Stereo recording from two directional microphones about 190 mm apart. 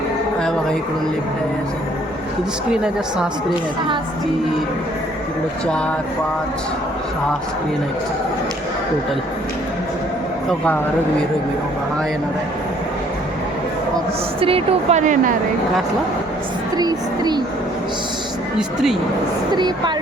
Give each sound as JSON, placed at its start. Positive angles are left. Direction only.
{"t": 14.4, "sound": "a woman's voice", "side_deg": -30}
{"t": 16.7, "sound": "speech", "side_deg": -20}
{"t": 19.5, "sound": "speech", "side_deg": -25}